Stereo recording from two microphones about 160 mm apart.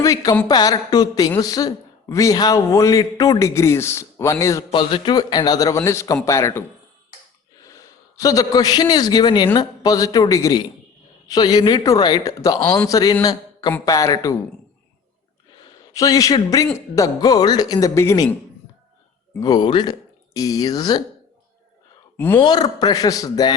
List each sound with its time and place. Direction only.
0.0 s a woman's voice: 20° left (ahead or behind)
15.9 s a man's voice: 20° left (ahead or behind)
19.4 s a man's voice: 25° left (ahead or behind)
22.4 s a man's voice: 25° left (ahead or behind)